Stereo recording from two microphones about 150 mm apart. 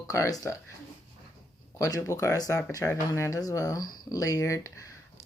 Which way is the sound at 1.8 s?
20° left (ahead or behind).